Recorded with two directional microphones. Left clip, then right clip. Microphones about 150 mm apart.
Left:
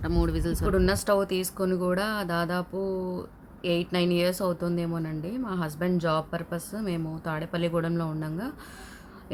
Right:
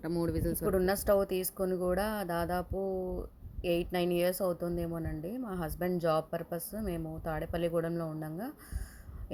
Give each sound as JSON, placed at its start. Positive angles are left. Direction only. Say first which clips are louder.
{"t": 0.0, "sound": "a woman's voice", "louder": "left 4 dB", "side_deg": -15}